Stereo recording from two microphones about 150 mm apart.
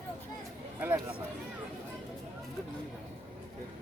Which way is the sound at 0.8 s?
15° right (ahead or behind).